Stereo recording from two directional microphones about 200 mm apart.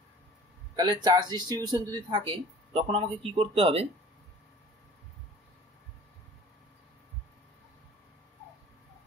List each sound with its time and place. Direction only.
0.7 s speech: 20° right (ahead or behind)